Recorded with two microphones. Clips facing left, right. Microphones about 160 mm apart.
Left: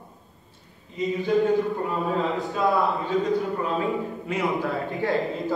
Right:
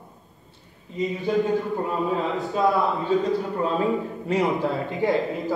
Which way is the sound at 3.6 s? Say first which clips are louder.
Right 3 dB; 35° right (ahead or behind).